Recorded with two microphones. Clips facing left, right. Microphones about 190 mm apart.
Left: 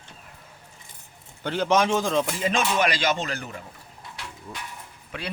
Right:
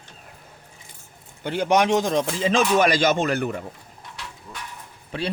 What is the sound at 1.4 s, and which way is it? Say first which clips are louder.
Speech: right 2 dB; 10° right (ahead or behind).